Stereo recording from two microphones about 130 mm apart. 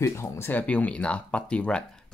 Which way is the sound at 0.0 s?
20° left (ahead or behind).